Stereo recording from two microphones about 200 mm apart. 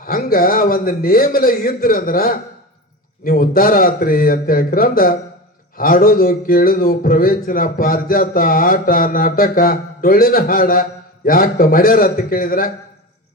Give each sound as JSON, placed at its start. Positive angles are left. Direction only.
{"t": 0.0, "sound": "speech", "side_deg": 45}